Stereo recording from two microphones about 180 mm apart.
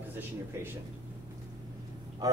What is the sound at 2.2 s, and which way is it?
Speech, 20° right (ahead or behind).